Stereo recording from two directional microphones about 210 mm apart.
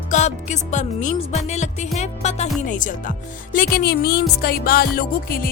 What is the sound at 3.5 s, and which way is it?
Speech, 45° left (ahead or behind).